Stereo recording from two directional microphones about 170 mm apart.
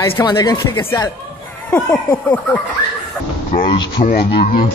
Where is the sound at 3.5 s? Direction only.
45° left (ahead or behind).